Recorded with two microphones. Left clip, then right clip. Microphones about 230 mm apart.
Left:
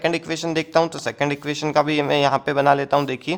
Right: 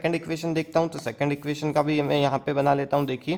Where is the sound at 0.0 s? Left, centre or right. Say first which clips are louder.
Left 4 dB; left.